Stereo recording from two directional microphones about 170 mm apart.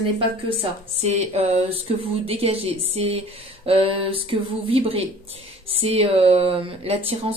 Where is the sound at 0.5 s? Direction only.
35° right (ahead or behind).